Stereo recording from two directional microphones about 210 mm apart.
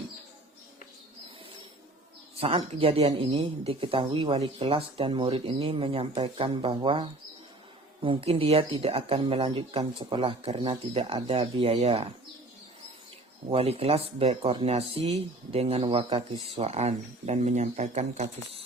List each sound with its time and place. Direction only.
2.4 s speech: 25° right (ahead or behind)
13.5 s speech: 30° right (ahead or behind)